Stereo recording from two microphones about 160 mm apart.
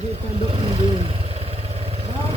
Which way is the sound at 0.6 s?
35° right (ahead or behind).